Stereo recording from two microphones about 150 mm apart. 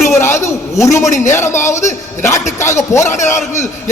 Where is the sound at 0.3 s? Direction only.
20° left (ahead or behind).